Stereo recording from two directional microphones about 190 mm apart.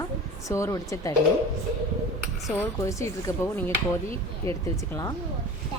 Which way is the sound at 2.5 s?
15° left (ahead or behind).